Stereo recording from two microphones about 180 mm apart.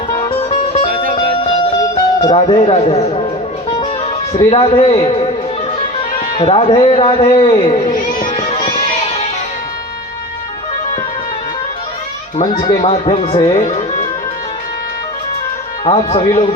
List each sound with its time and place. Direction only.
0.1 s music: 30° left (ahead or behind)
2.2 s speech: 30° left (ahead or behind)
3.8 s music: 30° left (ahead or behind)
6.0 s a man's voice: 30° left (ahead or behind)
12.4 s a man's voice: 25° left (ahead or behind)
12.7 s speech: 35° left (ahead or behind)
13.6 s music: 40° left (ahead or behind)
15.8 s a man's voice: 30° left (ahead or behind)